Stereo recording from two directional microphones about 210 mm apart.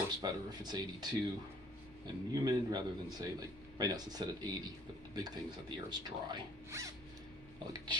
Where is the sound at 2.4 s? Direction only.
20° right (ahead or behind).